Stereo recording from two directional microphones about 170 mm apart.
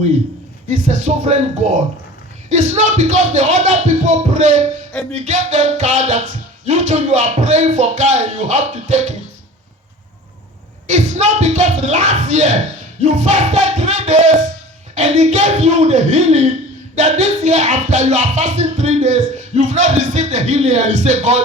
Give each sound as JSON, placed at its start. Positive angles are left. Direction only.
{"t": 0.7, "sound": "speech", "side_deg": -45}
{"t": 2.5, "sound": "speech", "side_deg": -45}
{"t": 10.8, "sound": "speech", "side_deg": -45}
{"t": 16.9, "sound": "music", "side_deg": -40}